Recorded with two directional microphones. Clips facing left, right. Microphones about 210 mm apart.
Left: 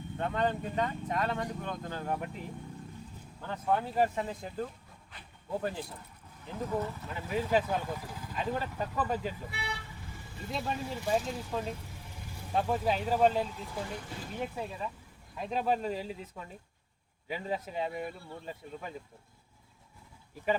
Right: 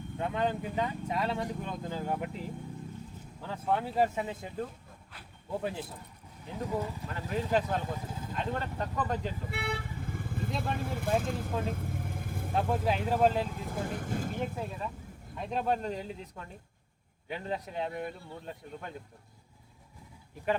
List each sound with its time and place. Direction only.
0.2 s speech: 5° right (ahead or behind)
3.4 s speech: 5° right (ahead or behind)
5.1 s a sound: centre (ahead or behind)
6.7 s speech: 10° right (ahead or behind)
7.1 s speech: 5° left (ahead or behind)
7.8 s speech: 20° right (ahead or behind)
8.3 s speech: 5° left (ahead or behind)
9.5 s vehicle: 55° right (ahead or behind)
10.6 s speech: 55° right (ahead or behind)
11.6 s vehicle: 50° right (ahead or behind)
12.5 s speech: centre (ahead or behind)
13.5 s speech: 50° right (ahead or behind)
14.5 s speech: centre (ahead or behind)